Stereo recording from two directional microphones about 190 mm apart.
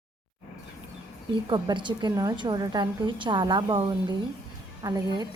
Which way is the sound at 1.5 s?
25° right (ahead or behind).